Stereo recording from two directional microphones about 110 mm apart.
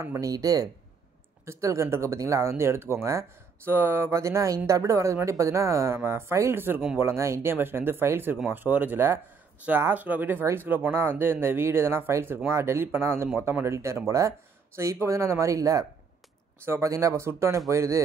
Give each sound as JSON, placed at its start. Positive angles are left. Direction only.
{"t": 0.0, "sound": "speech", "side_deg": -30}